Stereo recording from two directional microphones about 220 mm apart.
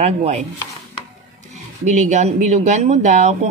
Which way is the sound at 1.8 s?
35° right (ahead or behind).